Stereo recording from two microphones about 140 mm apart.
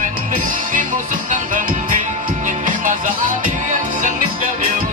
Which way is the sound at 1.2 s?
65° right (ahead or behind).